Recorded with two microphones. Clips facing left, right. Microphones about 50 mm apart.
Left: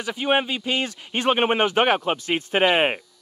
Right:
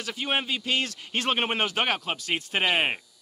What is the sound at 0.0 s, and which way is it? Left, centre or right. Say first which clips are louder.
Speech: left 7 dB; centre.